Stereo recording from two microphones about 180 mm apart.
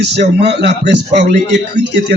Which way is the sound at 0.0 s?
70° right (ahead or behind).